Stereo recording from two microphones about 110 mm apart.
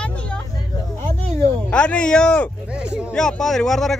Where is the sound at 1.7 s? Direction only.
10° left (ahead or behind).